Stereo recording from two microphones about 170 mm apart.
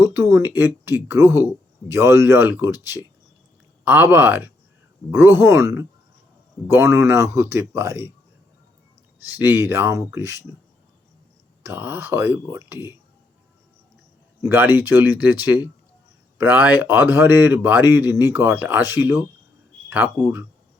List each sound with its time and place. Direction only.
0.0 s speech: 15° right (ahead or behind)
9.4 s speech: 15° right (ahead or behind)
11.6 s speech: 10° right (ahead or behind)
14.4 s speech: 10° right (ahead or behind)